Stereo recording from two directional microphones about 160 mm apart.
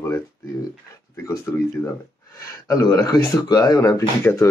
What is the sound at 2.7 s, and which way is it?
Speech, 20° left (ahead or behind).